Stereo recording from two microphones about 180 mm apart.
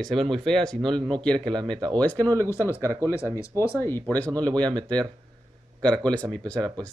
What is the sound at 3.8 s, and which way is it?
Speech, 15° left (ahead or behind).